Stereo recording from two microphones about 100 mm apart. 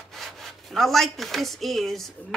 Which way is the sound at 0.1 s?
5° left (ahead or behind).